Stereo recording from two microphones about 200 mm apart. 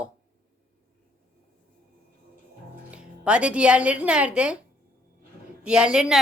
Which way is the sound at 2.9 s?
5° right (ahead or behind).